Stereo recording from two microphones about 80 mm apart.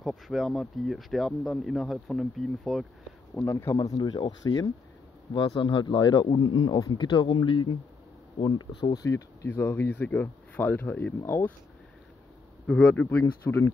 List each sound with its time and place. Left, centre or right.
0.0 s speech: centre
3.4 s speech: left
4.0 s speech: left
5.3 s speech: left
6.9 s speech: left
9.0 s speech: left
9.5 s speech: left
12.6 s speech: centre
13.2 s speech: left